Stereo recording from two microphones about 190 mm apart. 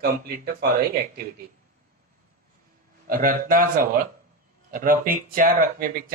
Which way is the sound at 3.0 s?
45° right (ahead or behind).